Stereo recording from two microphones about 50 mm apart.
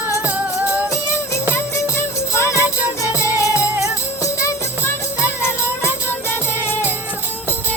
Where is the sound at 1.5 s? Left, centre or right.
Left.